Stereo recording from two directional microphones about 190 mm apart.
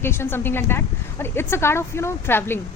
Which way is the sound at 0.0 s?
10° left (ahead or behind).